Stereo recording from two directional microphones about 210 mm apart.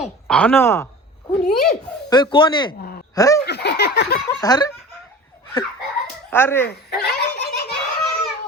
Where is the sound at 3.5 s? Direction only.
50° left (ahead or behind).